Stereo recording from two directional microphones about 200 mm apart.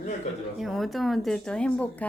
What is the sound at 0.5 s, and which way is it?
Speech, centre (ahead or behind).